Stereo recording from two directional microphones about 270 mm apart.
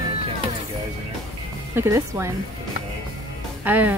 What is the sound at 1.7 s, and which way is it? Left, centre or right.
Speech, centre.